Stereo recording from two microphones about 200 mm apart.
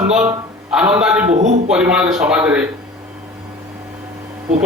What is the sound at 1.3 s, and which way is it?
Speech, 30° right (ahead or behind).